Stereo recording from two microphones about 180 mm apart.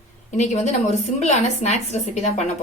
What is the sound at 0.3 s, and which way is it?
A woman's voice, 40° left (ahead or behind).